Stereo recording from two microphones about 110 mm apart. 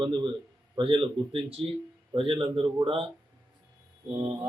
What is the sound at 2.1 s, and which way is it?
Speech, 50° right (ahead or behind).